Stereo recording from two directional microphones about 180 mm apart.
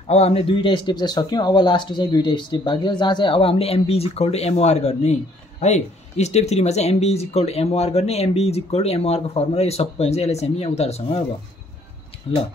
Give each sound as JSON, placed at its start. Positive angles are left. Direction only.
{"t": 0.0, "sound": "speech", "side_deg": 35}
{"t": 12.3, "sound": "speech", "side_deg": 30}